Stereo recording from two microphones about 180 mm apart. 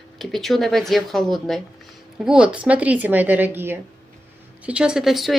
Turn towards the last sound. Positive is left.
turn(degrees=0)  # may be behind; listen again after turning